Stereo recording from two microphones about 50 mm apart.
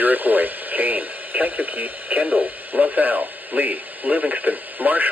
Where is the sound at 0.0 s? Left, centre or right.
Right.